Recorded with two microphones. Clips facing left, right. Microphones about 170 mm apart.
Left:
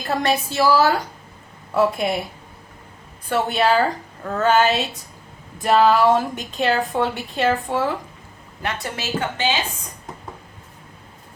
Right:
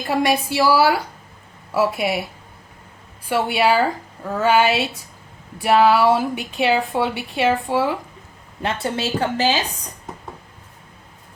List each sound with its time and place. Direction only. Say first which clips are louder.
0.1 s a woman's voice: right 2 dB; 10° right (ahead or behind)
3.2 s a woman's voice: right 1 dB; 10° right (ahead or behind)
8.6 s a woman's voice: right 4 dB; 30° right (ahead or behind)